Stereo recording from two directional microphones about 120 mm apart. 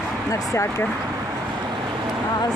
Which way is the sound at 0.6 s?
15° left (ahead or behind).